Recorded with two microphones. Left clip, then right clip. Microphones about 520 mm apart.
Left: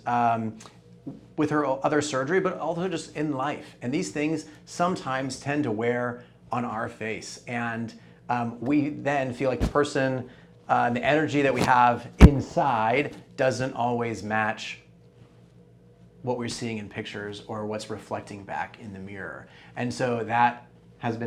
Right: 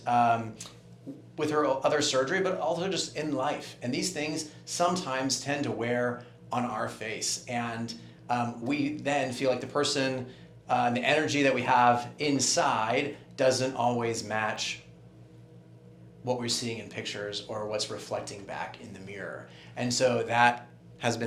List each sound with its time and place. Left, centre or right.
0.0 s speech: centre
16.2 s speech: centre